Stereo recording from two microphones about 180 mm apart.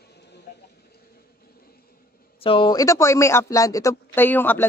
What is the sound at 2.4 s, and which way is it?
A man's voice, 30° left (ahead or behind).